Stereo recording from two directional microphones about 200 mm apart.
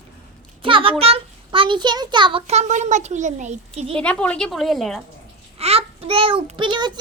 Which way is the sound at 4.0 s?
5° left (ahead or behind).